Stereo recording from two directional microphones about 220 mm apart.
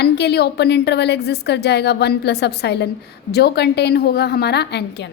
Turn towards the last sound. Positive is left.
turn(degrees=50)  # may be behind; listen again after turning